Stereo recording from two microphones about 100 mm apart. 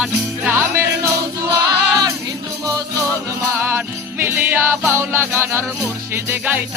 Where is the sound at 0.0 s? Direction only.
20° right (ahead or behind).